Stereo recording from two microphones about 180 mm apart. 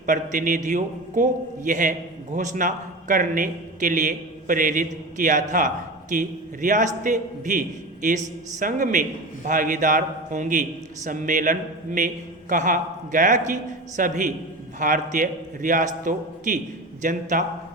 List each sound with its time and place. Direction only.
0.0 s a man's voice: 45° right (ahead or behind)